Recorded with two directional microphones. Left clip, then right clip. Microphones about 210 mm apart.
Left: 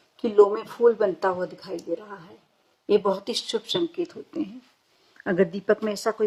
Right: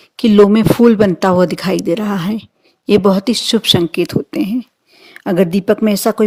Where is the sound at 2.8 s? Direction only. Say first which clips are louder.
Right 10 dB; 45° right (ahead or behind).